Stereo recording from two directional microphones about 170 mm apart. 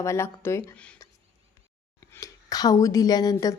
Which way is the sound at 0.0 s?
15° left (ahead or behind).